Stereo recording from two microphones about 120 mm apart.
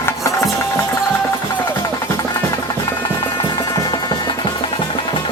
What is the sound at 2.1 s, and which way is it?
Music, 30° left (ahead or behind).